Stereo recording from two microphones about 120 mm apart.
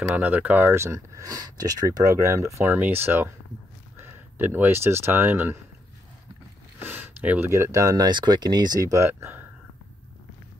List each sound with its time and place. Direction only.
0.0 s speech: 15° right (ahead or behind)
6.8 s speech: 15° right (ahead or behind)